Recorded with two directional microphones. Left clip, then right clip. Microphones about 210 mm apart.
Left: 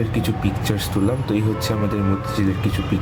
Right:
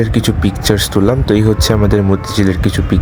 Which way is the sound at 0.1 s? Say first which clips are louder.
Right 7 dB; 45° right (ahead or behind).